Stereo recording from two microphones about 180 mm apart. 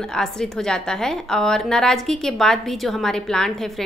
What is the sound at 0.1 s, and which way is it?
A woman's voice, 5° left (ahead or behind).